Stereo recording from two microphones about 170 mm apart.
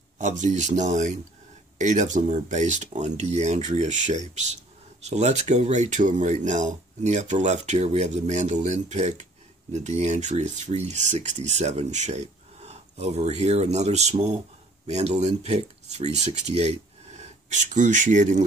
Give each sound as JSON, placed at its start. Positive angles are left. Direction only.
{"t": 0.2, "sound": "speech", "side_deg": -45}